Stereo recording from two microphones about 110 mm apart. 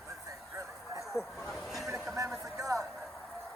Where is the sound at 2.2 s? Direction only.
30° right (ahead or behind).